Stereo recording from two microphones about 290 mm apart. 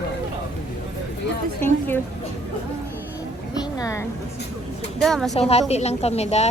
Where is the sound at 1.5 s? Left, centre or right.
Centre.